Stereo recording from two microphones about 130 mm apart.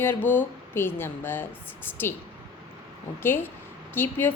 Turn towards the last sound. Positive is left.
turn(degrees=15)  # may be behind; listen again after turning